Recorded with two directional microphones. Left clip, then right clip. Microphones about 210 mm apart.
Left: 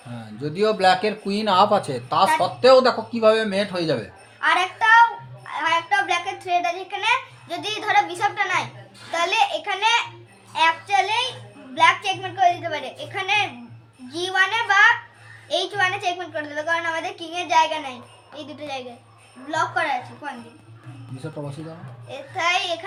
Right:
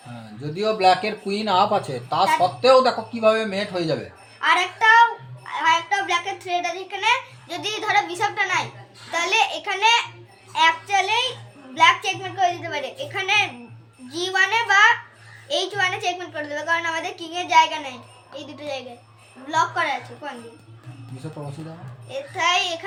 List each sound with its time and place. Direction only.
0.5 s speech: 50° left (ahead or behind)
4.4 s a child's voice: 5° right (ahead or behind)
22.1 s a woman's voice: centre (ahead or behind)